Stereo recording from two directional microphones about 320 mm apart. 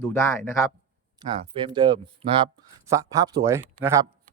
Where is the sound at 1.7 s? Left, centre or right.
Centre.